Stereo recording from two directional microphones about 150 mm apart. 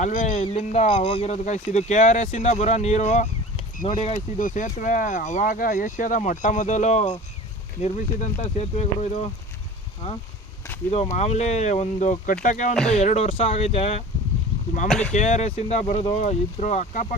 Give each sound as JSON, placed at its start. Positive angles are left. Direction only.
{"t": 0.0, "sound": "speech", "side_deg": 55}
{"t": 3.8, "sound": "speech", "side_deg": 35}
{"t": 4.4, "sound": "speech", "side_deg": 60}
{"t": 14.8, "sound": "speech", "side_deg": 5}
{"t": 15.1, "sound": "speech", "side_deg": 50}